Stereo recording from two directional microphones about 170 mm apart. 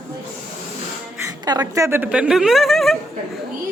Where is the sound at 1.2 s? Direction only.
20° right (ahead or behind); by 3.0 s centre (ahead or behind).